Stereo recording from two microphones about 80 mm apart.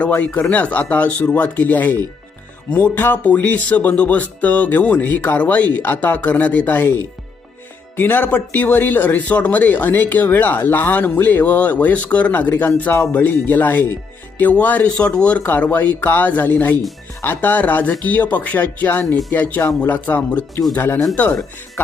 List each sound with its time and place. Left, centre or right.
0.0 s speech: centre
0.3 s speech: centre
0.5 s speech: centre
7.9 s speech: left